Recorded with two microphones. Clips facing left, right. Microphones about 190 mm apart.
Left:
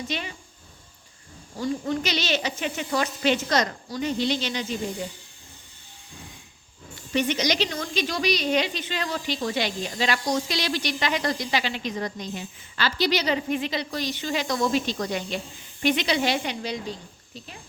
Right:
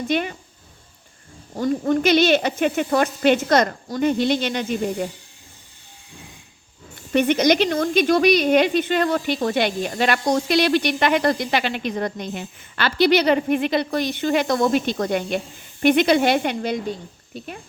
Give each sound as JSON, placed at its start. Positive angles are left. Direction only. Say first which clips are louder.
{"t": 0.1, "sound": "speech", "louder": "right 10 dB", "side_deg": -55}
{"t": 1.5, "sound": "speech", "louder": "right 7 dB", "side_deg": -50}
{"t": 7.1, "sound": "speech", "louder": "right 7 dB", "side_deg": -55}